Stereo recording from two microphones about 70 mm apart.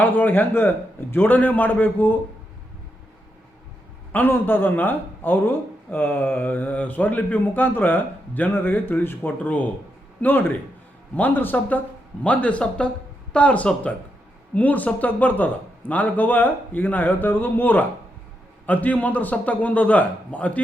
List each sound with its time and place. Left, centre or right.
0.0 s speech: left
4.1 s a man's voice: left